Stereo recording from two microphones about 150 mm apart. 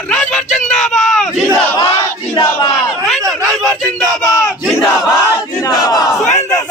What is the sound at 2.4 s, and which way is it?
Battle cry, 35° left (ahead or behind).